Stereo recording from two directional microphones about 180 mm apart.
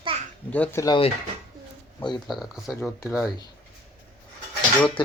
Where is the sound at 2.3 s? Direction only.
Centre (ahead or behind).